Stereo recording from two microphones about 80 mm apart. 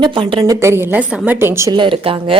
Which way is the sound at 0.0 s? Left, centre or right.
Right.